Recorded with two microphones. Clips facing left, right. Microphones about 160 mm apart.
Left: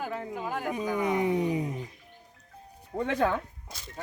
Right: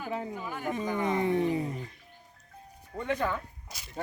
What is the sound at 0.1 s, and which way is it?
Speech, 5° right (ahead or behind).